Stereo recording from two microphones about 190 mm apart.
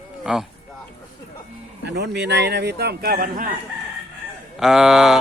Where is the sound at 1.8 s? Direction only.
60° right (ahead or behind); by 3.5 s 45° right (ahead or behind).